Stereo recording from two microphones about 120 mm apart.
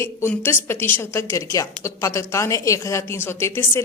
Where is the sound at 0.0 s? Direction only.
20° left (ahead or behind).